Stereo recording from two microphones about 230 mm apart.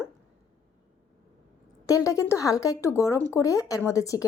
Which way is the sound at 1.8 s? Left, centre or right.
Centre.